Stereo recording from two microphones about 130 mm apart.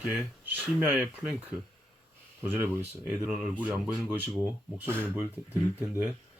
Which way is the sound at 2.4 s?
15° right (ahead or behind).